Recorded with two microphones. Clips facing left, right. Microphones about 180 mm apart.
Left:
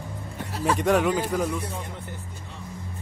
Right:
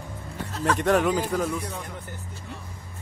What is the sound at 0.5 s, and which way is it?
Speech, 10° left (ahead or behind).